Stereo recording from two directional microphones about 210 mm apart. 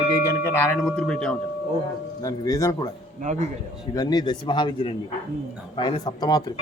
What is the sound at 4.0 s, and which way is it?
Speech, 20° left (ahead or behind).